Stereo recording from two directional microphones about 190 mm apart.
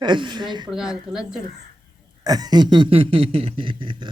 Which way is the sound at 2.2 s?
20° right (ahead or behind).